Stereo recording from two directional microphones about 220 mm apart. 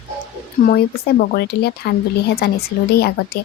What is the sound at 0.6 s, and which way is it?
Speech, 45° left (ahead or behind).